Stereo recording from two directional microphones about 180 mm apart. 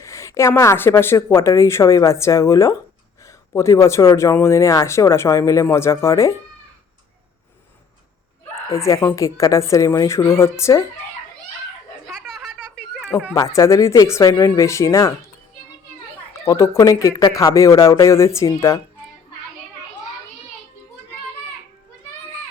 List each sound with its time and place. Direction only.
0.0 s speech: 15° left (ahead or behind)
8.8 s speech: 15° left (ahead or behind)
12.2 s a sound: centre (ahead or behind)
13.6 s speech: 15° left (ahead or behind)
16.4 s speech: 15° left (ahead or behind)